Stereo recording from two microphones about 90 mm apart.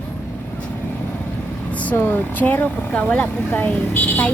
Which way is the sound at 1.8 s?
20° left (ahead or behind).